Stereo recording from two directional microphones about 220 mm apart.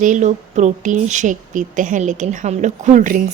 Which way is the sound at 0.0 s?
35° right (ahead or behind).